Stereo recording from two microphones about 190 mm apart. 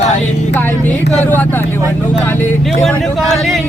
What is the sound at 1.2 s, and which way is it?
Speech, 10° left (ahead or behind).